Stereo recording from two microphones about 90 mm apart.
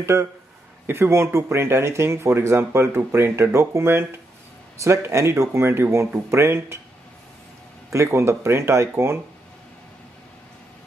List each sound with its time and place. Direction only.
0.0 s speech: 30° right (ahead or behind)
7.9 s speech: 30° right (ahead or behind)